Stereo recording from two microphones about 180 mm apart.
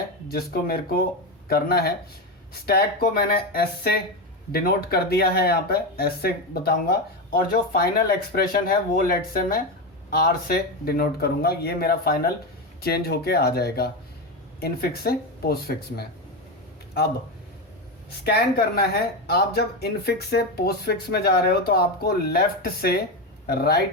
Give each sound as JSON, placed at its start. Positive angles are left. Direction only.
{"t": 0.3, "sound": "speech", "side_deg": 55}
{"t": 18.2, "sound": "speech", "side_deg": 60}